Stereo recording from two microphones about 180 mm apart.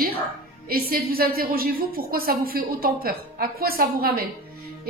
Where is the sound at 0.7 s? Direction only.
55° right (ahead or behind).